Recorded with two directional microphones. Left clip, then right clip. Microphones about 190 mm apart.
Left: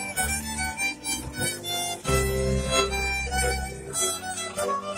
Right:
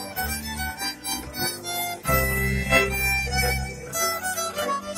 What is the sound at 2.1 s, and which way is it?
Music, 25° right (ahead or behind).